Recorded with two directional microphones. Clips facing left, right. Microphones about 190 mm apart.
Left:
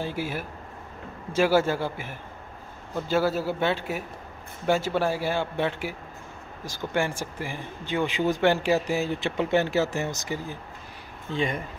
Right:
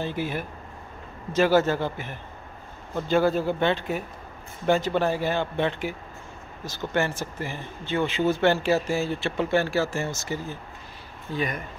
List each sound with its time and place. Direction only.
0.0 s speech: 10° left (ahead or behind)
11.3 s speech: 25° left (ahead or behind)